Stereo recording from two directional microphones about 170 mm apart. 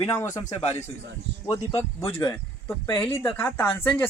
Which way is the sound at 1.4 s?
20° left (ahead or behind).